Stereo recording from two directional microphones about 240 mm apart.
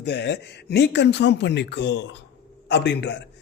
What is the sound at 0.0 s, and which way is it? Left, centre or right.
A man's voice, left.